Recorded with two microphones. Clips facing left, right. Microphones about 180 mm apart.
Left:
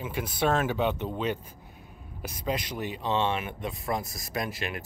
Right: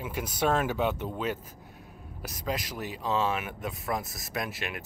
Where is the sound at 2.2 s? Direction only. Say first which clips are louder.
Left 2 dB; centre (ahead or behind).